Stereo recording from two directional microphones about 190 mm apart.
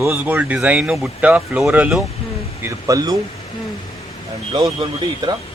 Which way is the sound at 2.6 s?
15° right (ahead or behind).